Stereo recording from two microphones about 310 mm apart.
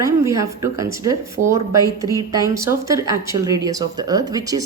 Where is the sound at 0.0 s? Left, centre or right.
Centre.